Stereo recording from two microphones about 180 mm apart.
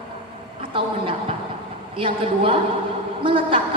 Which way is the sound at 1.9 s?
30° right (ahead or behind).